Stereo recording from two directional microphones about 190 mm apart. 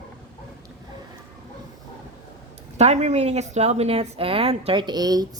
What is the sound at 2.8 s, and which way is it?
Speech, 35° right (ahead or behind).